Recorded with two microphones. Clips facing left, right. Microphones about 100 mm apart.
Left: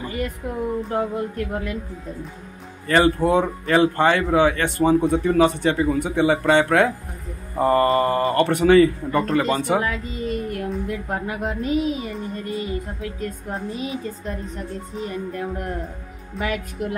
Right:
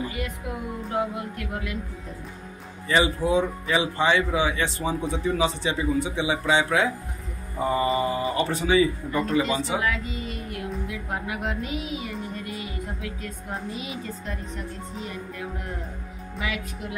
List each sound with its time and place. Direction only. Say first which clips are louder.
0.8 s speech: left 4 dB; 40° left (ahead or behind)
2.9 s speech: left 5 dB; 55° left (ahead or behind)
9.8 s a woman's voice: left 3 dB; 35° left (ahead or behind)